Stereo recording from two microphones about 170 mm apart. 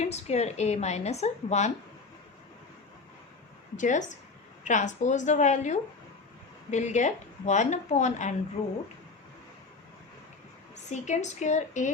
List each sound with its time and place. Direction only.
0.0 s a woman's voice: 40° left (ahead or behind)
3.8 s speech: 45° left (ahead or behind)
10.9 s speech: 45° left (ahead or behind)